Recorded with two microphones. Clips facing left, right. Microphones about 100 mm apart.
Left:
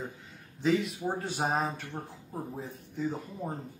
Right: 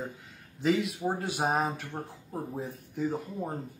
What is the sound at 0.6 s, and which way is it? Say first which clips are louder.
Speech: even; centre (ahead or behind).